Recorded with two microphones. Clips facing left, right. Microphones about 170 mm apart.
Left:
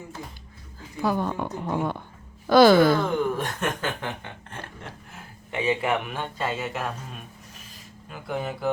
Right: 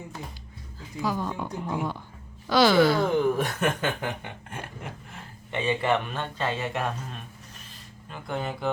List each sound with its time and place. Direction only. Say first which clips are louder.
0.9 s a woman's voice: left 4 dB; 60° left (ahead or behind)
2.5 s speech: left 4 dB; 50° left (ahead or behind)
3.3 s speech: right 2 dB; 10° right (ahead or behind)
5.1 s speech: left 2 dB; 10° left (ahead or behind)